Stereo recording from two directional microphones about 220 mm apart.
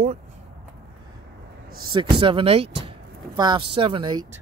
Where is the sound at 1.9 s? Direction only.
20° right (ahead or behind).